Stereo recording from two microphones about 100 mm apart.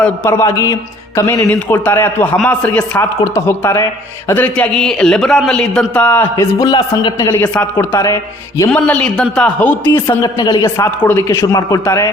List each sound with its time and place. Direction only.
0.3 s a man's voice: 30° left (ahead or behind)
1.5 s a man's voice: 20° left (ahead or behind)
3.0 s a man's voice: 25° left (ahead or behind)
6.3 s a man's voice: 30° left (ahead or behind)
7.3 s a man's voice: 15° left (ahead or behind)
7.8 s a man's voice: 30° left (ahead or behind)
8.7 s a man's voice: 10° left (ahead or behind)
10.2 s a man's voice: 40° left (ahead or behind)